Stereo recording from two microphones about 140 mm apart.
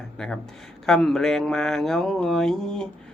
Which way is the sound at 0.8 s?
5° left (ahead or behind).